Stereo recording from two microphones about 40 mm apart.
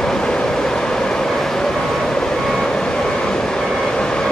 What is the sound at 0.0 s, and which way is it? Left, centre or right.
Train, centre.